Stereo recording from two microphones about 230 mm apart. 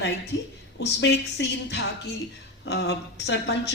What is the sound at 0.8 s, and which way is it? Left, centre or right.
Speech, left.